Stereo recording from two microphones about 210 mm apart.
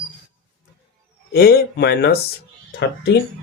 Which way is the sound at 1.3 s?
50° left (ahead or behind).